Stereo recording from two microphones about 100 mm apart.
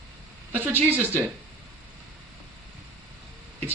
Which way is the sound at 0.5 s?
20° right (ahead or behind).